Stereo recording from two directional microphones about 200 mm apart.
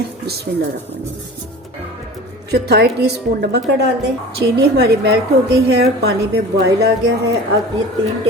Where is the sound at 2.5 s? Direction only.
55° right (ahead or behind).